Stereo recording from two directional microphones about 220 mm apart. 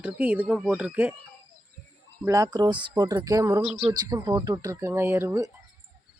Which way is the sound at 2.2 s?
15° right (ahead or behind).